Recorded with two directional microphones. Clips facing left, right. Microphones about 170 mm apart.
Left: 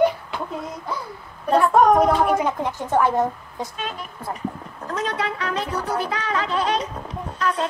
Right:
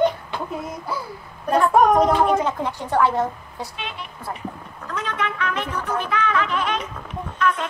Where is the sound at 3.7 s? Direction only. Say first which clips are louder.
Left 2 dB; 40° left (ahead or behind).